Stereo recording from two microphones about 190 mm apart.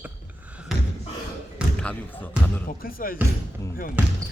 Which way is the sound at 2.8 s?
50° left (ahead or behind).